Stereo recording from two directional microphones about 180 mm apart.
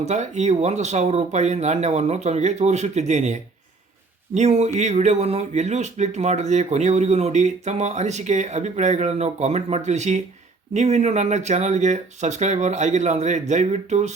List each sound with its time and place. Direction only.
0.0 s speech: 40° right (ahead or behind)